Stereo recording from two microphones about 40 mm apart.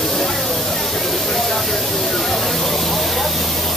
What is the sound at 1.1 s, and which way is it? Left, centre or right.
Spray, centre.